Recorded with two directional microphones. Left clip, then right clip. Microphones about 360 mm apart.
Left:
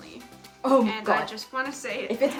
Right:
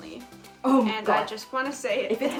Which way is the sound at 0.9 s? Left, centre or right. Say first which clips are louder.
Right 1 dB; centre.